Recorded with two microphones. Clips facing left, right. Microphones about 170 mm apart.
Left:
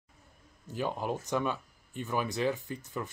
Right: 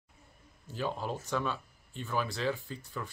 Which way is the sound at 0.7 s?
15° left (ahead or behind).